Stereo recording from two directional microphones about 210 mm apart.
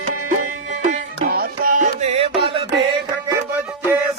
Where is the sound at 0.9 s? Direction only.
40° right (ahead or behind); by 2.7 s 25° right (ahead or behind).